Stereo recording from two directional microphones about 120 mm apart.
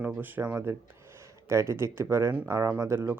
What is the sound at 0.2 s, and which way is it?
Speech, 15° right (ahead or behind).